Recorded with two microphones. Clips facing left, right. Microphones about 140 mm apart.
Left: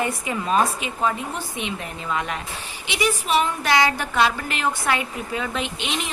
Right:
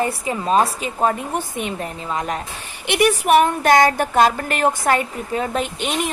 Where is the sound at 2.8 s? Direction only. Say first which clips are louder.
Right 7 dB; 60° right (ahead or behind).